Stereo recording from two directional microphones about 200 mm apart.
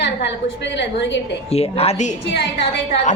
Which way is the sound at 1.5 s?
30° left (ahead or behind).